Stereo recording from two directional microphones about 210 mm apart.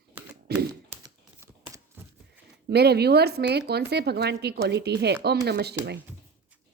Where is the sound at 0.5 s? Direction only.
15° right (ahead or behind).